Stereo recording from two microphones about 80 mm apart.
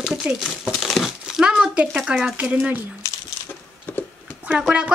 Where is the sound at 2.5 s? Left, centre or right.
Right.